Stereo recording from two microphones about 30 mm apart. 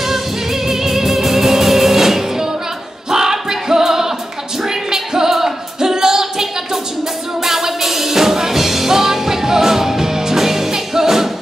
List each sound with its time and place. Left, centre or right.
0.0 s music: centre